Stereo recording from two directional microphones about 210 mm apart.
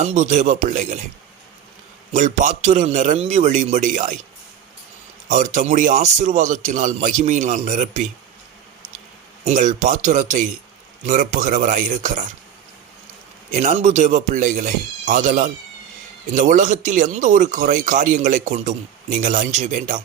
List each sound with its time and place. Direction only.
0.0 s speech: 30° right (ahead or behind)
2.1 s speech: 35° right (ahead or behind)
5.3 s speech: 35° right (ahead or behind)
9.4 s speech: 35° right (ahead or behind)
13.5 s speech: 35° right (ahead or behind)